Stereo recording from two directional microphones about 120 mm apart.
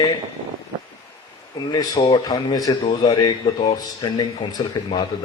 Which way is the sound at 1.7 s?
35° left (ahead or behind).